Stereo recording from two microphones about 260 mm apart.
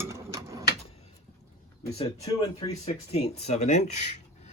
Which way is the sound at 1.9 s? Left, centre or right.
Left.